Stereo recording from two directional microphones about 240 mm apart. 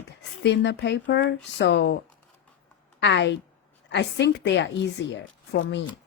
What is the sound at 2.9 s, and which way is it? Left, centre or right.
A woman's voice, left.